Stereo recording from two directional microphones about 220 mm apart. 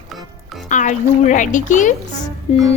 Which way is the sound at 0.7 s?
35° left (ahead or behind).